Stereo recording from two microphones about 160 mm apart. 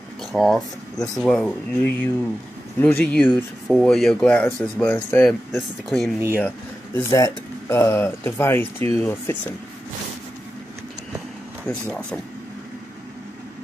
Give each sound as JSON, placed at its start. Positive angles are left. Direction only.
{"t": 0.2, "sound": "speech", "side_deg": 0}
{"t": 5.5, "sound": "speech", "side_deg": 0}
{"t": 6.4, "sound": "speech", "side_deg": 15}
{"t": 11.6, "sound": "speech", "side_deg": 5}